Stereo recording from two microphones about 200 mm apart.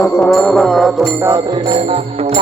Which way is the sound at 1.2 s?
20° right (ahead or behind).